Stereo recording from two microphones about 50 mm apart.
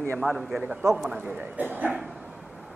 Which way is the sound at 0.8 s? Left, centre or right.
Right.